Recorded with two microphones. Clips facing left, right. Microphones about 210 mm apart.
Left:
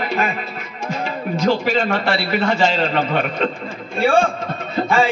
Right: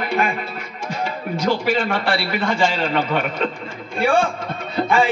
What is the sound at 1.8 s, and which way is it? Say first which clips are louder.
A man's voice: left 2 dB; 45° left (ahead or behind).